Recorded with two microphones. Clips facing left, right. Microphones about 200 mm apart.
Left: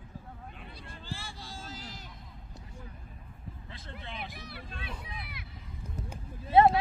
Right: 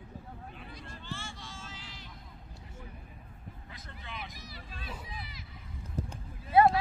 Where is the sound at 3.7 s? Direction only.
30° left (ahead or behind).